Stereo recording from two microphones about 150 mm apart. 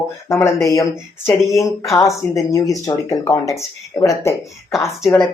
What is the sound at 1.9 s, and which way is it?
Speech, 20° left (ahead or behind).